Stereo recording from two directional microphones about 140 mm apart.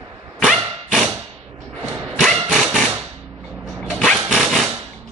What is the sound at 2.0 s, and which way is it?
Thump, centre (ahead or behind).